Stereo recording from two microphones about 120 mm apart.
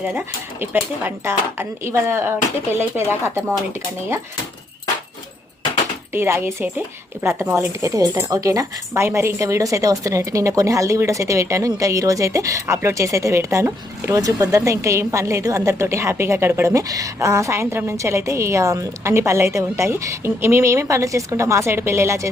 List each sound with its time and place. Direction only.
0.6 s a woman's voice: 15° right (ahead or behind)
6.1 s a woman's voice: 20° right (ahead or behind)